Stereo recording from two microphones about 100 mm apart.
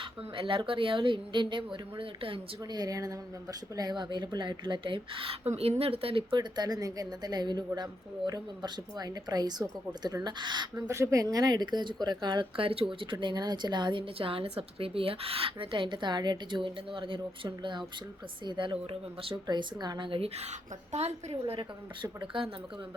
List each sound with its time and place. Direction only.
0.0 s a woman's voice: 60° right (ahead or behind)
2.7 s a woman's voice: 40° right (ahead or behind); by 6.2 s 70° right (ahead or behind)
6.3 s a woman's voice: 45° right (ahead or behind)
10.8 s a woman's voice: 30° right (ahead or behind); by 19.4 s 70° right (ahead or behind)
19.5 s a woman's voice: 45° right (ahead or behind); by 21.6 s 85° right
21.6 s a woman's voice: 50° right (ahead or behind)